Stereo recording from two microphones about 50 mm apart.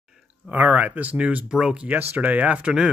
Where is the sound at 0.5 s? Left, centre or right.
Right.